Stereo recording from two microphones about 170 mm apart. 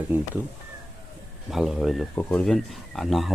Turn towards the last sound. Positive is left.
turn(degrees=0)  # may be behind; listen again after turning